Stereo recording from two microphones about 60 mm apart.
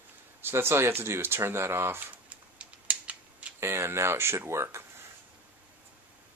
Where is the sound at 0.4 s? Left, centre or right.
Right.